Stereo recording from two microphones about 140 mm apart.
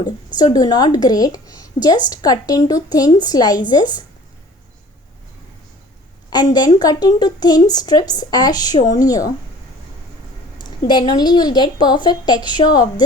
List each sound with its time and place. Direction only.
0.3 s a woman's voice: 30° left (ahead or behind)
6.3 s a woman's voice: 30° left (ahead or behind)
10.6 s a woman's voice: 30° left (ahead or behind)